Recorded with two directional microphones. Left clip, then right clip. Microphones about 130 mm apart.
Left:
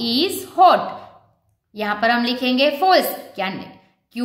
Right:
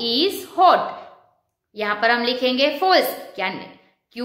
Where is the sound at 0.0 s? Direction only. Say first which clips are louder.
Even; 40° left (ahead or behind).